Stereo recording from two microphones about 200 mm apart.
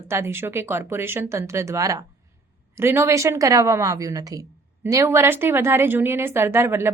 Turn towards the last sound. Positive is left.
turn(degrees=-10)  # may be behind; listen again after turning